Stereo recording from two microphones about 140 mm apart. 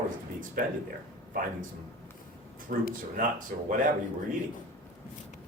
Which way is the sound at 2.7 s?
75° right (ahead or behind).